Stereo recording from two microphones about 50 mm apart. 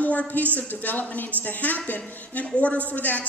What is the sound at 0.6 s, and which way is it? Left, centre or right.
A woman's voice, left.